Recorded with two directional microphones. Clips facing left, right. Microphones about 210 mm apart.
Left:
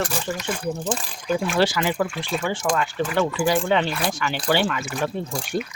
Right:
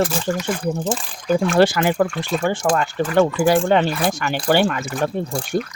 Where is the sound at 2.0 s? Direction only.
Centre (ahead or behind).